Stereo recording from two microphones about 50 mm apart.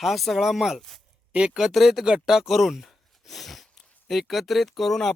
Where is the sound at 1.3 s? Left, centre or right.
Right.